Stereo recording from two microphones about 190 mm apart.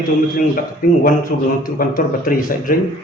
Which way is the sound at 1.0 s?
50° left (ahead or behind).